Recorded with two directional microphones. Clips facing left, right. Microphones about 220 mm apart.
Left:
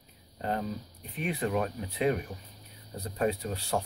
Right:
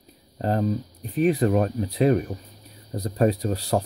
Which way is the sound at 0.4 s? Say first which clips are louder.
Right 9 dB; 35° right (ahead or behind).